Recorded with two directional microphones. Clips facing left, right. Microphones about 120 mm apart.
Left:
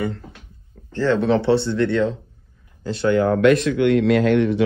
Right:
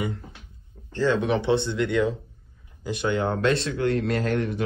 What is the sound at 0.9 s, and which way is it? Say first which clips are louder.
Speech: left 4 dB; 15° right (ahead or behind).